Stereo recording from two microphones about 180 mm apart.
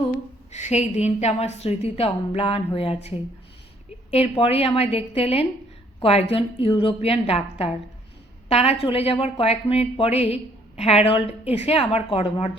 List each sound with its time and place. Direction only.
0.1 s a woman's voice: 40° left (ahead or behind)